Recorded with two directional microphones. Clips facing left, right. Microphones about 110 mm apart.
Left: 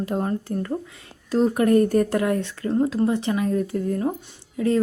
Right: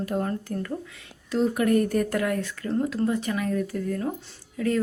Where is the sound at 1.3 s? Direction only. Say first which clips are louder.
Left 4 dB; 40° left (ahead or behind).